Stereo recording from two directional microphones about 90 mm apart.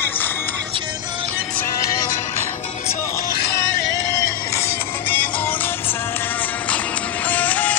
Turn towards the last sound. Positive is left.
turn(degrees=20)  # may be behind; listen again after turning